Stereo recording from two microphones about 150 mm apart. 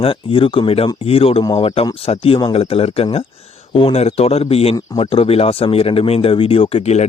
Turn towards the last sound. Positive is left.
turn(degrees=45)  # may be behind; listen again after turning